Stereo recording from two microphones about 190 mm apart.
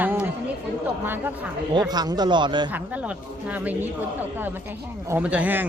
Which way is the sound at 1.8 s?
20° right (ahead or behind).